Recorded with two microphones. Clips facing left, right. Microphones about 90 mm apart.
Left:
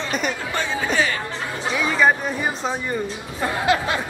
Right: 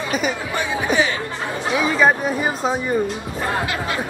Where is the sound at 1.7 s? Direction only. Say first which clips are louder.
Right 2 dB; 5° right (ahead or behind).